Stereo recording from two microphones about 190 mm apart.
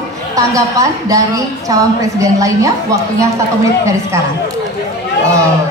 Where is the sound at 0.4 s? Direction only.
15° right (ahead or behind).